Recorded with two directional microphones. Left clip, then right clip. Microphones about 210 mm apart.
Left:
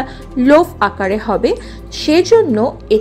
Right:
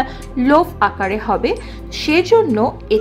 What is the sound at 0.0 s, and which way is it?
Speech, 15° left (ahead or behind).